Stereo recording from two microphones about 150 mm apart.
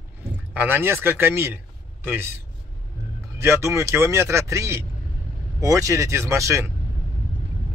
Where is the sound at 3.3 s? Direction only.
20° right (ahead or behind).